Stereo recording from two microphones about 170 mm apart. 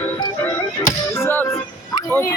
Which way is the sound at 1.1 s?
15° left (ahead or behind).